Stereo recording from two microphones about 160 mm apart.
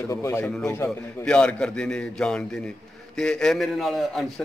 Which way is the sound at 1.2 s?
5° left (ahead or behind).